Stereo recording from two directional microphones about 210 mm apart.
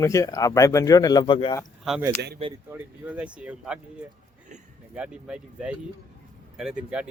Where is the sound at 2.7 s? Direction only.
10° right (ahead or behind).